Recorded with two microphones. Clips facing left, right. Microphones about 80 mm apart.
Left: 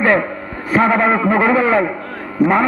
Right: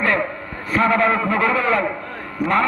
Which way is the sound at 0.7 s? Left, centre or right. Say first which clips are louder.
Left 3 dB; centre.